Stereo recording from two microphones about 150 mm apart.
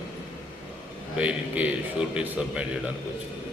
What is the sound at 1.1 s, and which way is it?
A man's voice, 10° right (ahead or behind).